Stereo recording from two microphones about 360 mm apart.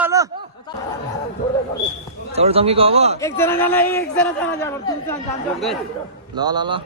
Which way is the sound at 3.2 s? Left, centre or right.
Centre.